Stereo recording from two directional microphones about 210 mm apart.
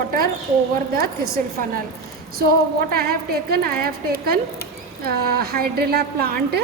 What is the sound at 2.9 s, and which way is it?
Speech, 45° right (ahead or behind).